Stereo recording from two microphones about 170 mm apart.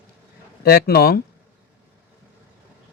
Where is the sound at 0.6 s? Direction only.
65° left (ahead or behind).